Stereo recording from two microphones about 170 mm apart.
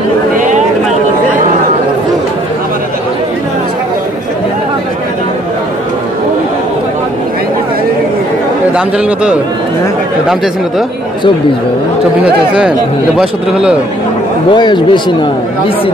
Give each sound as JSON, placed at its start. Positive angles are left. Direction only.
{"t": 0.4, "sound": "a sound", "side_deg": -45}
{"t": 8.7, "sound": "speech", "side_deg": -5}
{"t": 13.2, "sound": "speech", "side_deg": -5}
{"t": 14.5, "sound": "speech", "side_deg": 25}